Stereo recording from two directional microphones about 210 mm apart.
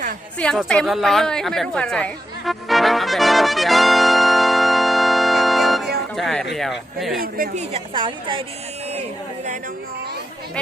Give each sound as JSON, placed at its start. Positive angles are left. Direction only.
{"t": 0.3, "sound": "a sound", "side_deg": 5}
{"t": 6.1, "sound": "speech", "side_deg": 0}
{"t": 7.2, "sound": "a woman's voice", "side_deg": -40}